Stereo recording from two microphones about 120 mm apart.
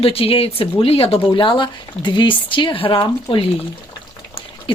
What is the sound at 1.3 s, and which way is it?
Speech, 45° left (ahead or behind).